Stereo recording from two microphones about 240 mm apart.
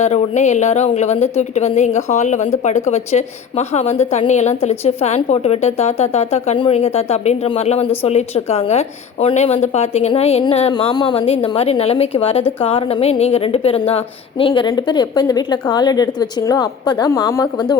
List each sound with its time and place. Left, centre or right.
0.0 s a woman's voice: left